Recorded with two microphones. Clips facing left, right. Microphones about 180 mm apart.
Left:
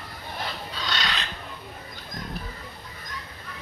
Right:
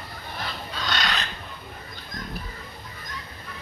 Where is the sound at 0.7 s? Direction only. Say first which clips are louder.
Right 5 dB; 50° right (ahead or behind).